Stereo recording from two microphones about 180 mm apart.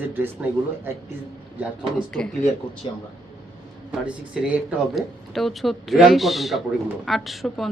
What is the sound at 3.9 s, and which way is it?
Speech, 5° right (ahead or behind).